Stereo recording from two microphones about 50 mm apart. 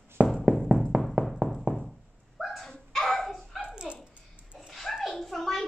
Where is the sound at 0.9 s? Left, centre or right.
Right.